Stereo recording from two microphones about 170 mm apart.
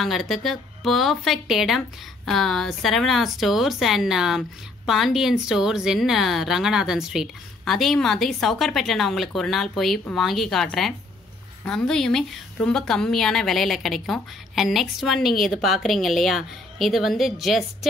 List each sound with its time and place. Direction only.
0.0 s a woman's voice: centre (ahead or behind)